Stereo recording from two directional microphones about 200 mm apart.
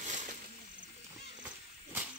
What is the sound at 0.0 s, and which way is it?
Snake, 35° right (ahead or behind).